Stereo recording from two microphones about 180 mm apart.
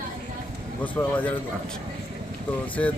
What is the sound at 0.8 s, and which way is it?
Speech, 10° left (ahead or behind).